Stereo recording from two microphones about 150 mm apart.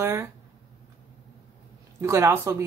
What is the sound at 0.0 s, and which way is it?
Speech, 15° right (ahead or behind).